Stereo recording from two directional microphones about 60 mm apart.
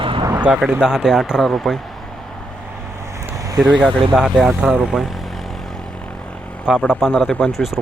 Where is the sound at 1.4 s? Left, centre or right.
Centre.